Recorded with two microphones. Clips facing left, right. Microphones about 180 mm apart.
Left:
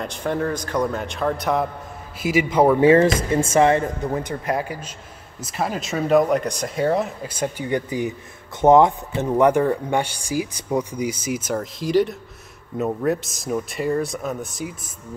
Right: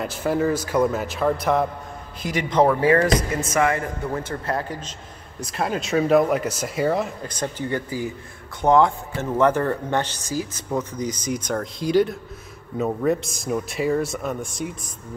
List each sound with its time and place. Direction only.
0.0 s speech: 5° right (ahead or behind)
2.8 s speech: 25° left (ahead or behind); by 14.7 s centre (ahead or behind)